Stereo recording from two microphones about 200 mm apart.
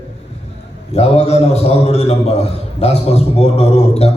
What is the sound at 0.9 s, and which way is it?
A man's voice, 30° left (ahead or behind).